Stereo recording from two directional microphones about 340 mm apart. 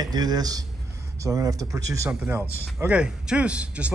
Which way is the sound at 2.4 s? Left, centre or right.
Centre.